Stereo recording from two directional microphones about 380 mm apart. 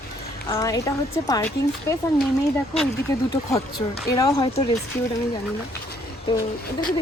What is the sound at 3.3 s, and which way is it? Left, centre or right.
Speech, centre.